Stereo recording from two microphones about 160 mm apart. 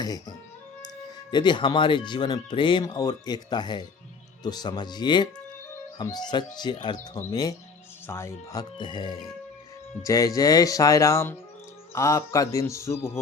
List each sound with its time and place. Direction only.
0.0 s speech: 25° left (ahead or behind)
8.8 s speech: 30° left (ahead or behind)